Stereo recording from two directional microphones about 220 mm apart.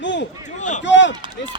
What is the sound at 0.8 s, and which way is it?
Speech, 55° left (ahead or behind).